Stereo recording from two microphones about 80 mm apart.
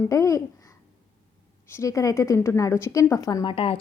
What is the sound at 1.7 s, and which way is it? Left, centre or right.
A woman's voice, left.